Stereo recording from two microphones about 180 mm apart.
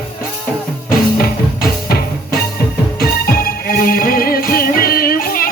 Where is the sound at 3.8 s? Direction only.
50° left (ahead or behind).